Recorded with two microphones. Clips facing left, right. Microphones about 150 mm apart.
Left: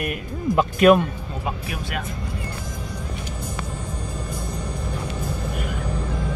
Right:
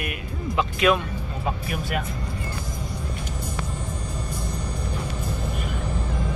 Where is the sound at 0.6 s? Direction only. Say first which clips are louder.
Left 6 dB; 45° left (ahead or behind).